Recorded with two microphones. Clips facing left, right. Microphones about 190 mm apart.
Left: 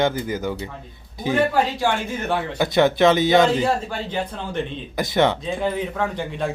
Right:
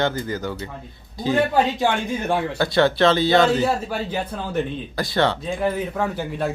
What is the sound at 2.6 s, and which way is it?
A man's voice, 15° left (ahead or behind).